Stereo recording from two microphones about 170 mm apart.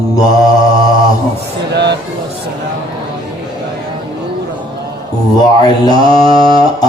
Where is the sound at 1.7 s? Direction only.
90° right.